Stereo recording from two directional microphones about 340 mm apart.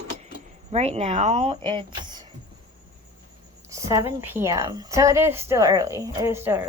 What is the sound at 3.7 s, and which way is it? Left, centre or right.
A woman's voice, centre.